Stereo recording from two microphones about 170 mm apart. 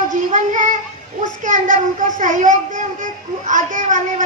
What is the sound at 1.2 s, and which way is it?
A child's voice, 50° right (ahead or behind).